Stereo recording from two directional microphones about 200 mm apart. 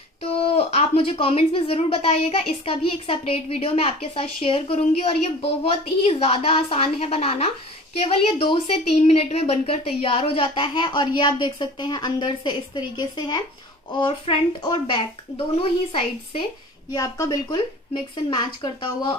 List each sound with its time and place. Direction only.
0.2 s speech: 30° left (ahead or behind)